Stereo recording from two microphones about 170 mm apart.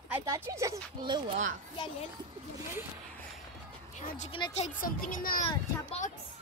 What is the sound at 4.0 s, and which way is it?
Speech, 55° left (ahead or behind).